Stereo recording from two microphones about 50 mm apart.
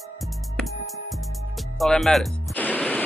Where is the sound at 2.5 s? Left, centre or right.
Left.